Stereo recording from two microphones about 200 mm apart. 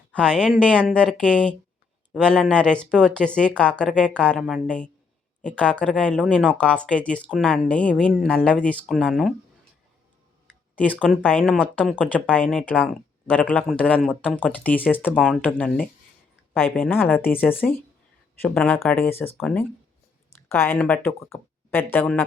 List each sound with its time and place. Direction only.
0.1 s speech: 5° left (ahead or behind)
10.8 s speech: 5° left (ahead or behind)
15.1 s speech: 5° right (ahead or behind)
15.4 s speech: 5° left (ahead or behind)